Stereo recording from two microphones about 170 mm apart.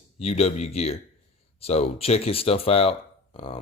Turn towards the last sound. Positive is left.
turn(degrees=35)  # may be behind; listen again after turning